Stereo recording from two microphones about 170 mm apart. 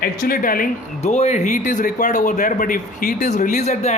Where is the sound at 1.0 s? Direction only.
40° left (ahead or behind).